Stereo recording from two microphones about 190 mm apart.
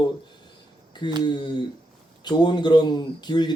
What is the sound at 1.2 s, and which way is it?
Speech, 25° left (ahead or behind).